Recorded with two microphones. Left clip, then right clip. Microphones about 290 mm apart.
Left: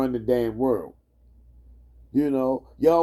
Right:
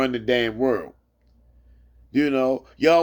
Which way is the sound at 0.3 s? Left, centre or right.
Centre.